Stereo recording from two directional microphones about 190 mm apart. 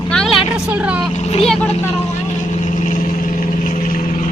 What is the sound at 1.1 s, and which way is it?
Speech, 35° left (ahead or behind).